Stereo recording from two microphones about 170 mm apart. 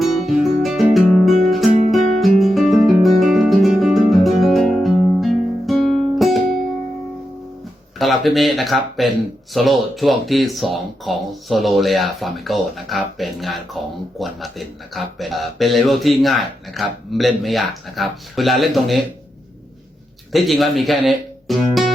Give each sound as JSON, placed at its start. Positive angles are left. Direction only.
{"t": 0.0, "sound": "music", "side_deg": 0}
{"t": 6.3, "sound": "music", "side_deg": -45}
{"t": 7.9, "sound": "speech", "side_deg": 0}
{"t": 20.3, "sound": "speech", "side_deg": 0}